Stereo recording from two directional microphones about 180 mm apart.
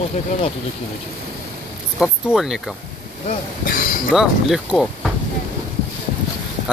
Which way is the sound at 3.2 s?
50° left (ahead or behind).